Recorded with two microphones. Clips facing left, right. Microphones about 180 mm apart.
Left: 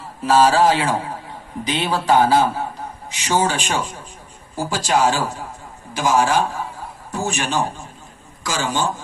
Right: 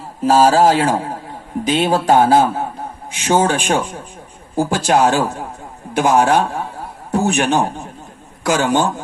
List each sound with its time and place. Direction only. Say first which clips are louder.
0.3 s a man's voice: right 3 dB; 40° right (ahead or behind); by 9.0 s 60° right (ahead or behind)